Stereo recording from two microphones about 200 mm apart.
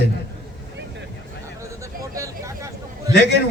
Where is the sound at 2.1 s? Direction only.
15° right (ahead or behind).